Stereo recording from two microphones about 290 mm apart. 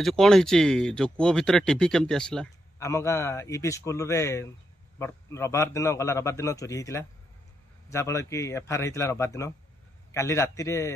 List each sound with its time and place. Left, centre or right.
0.0 s speech: centre